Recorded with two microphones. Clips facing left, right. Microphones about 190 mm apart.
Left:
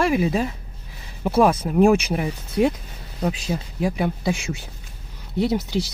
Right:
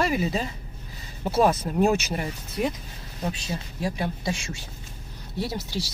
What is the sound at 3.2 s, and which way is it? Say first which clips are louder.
Speech: left 6 dB; 60° left (ahead or behind).